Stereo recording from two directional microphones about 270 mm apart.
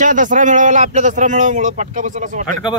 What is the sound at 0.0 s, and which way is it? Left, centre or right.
A man's voice, right.